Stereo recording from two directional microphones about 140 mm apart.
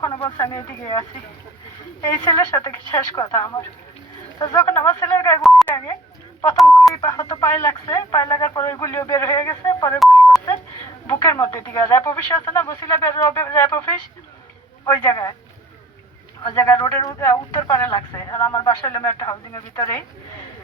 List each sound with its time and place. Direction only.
0.3 s speech: 25° left (ahead or behind)
5.4 s telephone: centre (ahead or behind)
5.7 s speech: 25° left (ahead or behind)
6.6 s speech: centre (ahead or behind)
6.9 s speech: 20° left (ahead or behind)
11.0 s speech: 20° left (ahead or behind)
16.7 s speech: 25° left (ahead or behind)